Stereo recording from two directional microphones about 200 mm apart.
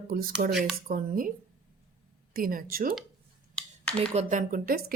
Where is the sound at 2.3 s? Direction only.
45° right (ahead or behind).